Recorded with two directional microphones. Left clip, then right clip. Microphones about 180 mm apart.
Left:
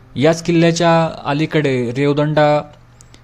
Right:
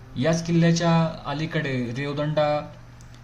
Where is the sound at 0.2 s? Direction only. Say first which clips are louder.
Left 10 dB; 45° left (ahead or behind).